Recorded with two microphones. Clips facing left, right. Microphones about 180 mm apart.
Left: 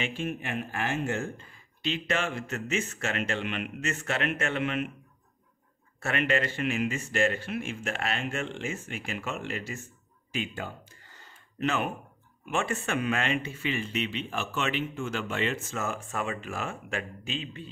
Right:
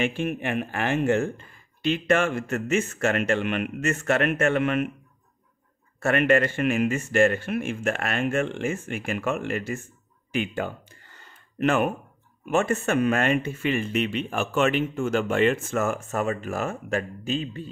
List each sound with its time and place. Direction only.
0.0 s speech: 60° right (ahead or behind)
5.9 s speech: 50° right (ahead or behind)
10.3 s a sound: 65° right (ahead or behind)
12.4 s speech: 45° right (ahead or behind)